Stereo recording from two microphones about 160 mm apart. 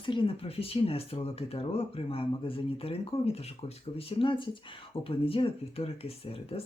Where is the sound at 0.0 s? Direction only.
30° left (ahead or behind).